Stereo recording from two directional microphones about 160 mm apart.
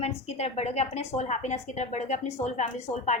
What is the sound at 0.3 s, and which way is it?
A woman's voice, 45° left (ahead or behind).